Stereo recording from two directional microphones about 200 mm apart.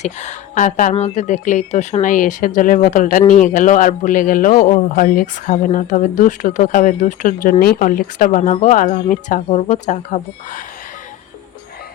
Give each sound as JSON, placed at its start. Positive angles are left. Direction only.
{"t": 0.0, "sound": "speech", "side_deg": 35}